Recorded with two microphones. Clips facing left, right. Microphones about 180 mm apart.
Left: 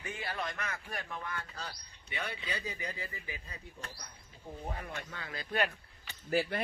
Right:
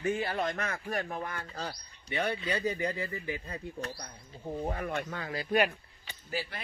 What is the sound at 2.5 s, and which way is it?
Speech, 55° right (ahead or behind).